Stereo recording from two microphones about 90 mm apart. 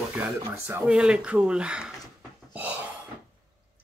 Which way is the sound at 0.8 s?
10° right (ahead or behind).